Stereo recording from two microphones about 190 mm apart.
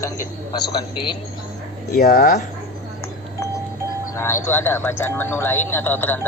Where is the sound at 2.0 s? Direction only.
50° left (ahead or behind).